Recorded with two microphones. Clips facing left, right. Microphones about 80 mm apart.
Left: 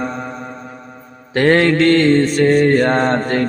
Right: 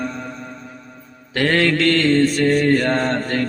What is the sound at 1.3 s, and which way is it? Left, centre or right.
Mantra, left.